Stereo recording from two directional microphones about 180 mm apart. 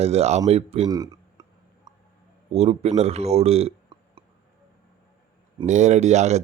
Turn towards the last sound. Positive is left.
turn(degrees=-40)  # may be behind; listen again after turning